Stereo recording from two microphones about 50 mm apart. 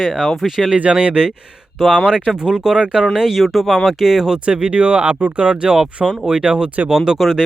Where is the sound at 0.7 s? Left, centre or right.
Right.